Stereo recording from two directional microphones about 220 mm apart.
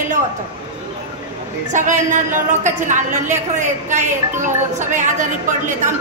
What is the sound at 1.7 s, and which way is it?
A woman's voice, 35° right (ahead or behind).